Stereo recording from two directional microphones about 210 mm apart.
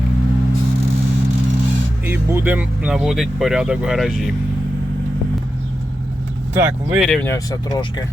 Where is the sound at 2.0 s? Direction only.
10° right (ahead or behind).